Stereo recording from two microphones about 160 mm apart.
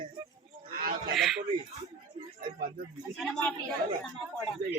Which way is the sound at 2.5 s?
60° right (ahead or behind).